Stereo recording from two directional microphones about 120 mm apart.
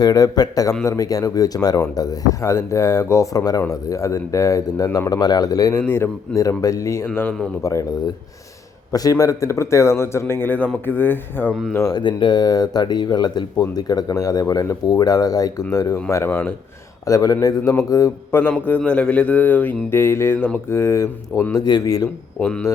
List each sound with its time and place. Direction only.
0.0 s speech: 30° left (ahead or behind)
5.8 s speech: 20° left (ahead or behind)
11.7 s speech: 30° left (ahead or behind)
17.1 s a man's voice: 30° left (ahead or behind)